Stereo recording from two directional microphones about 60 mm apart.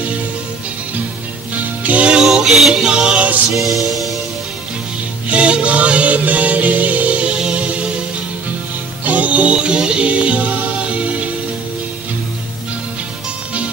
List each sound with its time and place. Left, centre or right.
1.8 s music: right
2.1 s music: centre
3.5 s music: centre
5.3 s music: centre
9.0 s music: right